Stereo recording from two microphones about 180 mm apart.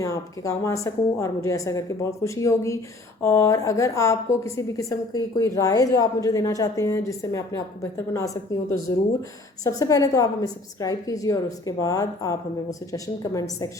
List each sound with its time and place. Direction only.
0.0 s a woman's voice: 15° left (ahead or behind)
9.6 s a woman's voice: 20° left (ahead or behind)